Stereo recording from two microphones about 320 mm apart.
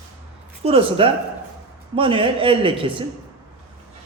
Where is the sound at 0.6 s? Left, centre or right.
Centre.